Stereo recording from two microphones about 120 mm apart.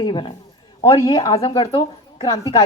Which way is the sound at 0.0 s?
40° left (ahead or behind).